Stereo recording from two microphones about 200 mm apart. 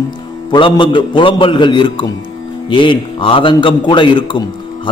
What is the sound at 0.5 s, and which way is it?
A man's voice, 25° left (ahead or behind).